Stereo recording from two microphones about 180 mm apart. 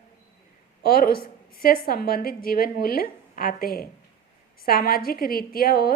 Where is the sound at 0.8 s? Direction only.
60° left (ahead or behind).